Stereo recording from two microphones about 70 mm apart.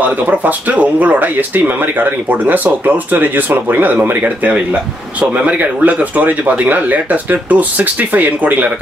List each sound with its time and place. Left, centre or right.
0.3 s speech: right